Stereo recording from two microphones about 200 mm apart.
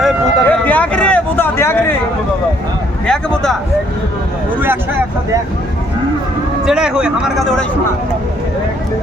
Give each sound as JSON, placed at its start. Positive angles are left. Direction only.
{"t": 0.0, "sound": "speech", "side_deg": 10}
{"t": 3.1, "sound": "a man's voice", "side_deg": 5}
{"t": 6.7, "sound": "a man's voice", "side_deg": -5}